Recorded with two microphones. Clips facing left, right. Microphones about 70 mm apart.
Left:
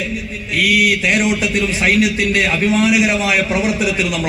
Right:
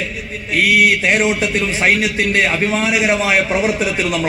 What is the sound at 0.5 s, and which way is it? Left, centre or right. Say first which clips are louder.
Speech: right 2 dB; right.